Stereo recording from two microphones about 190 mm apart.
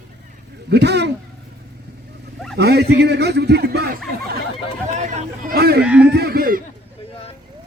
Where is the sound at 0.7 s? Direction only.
60° right (ahead or behind).